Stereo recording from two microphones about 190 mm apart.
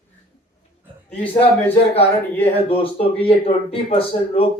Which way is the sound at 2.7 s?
30° left (ahead or behind).